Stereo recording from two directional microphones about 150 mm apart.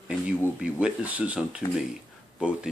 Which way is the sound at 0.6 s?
10° right (ahead or behind).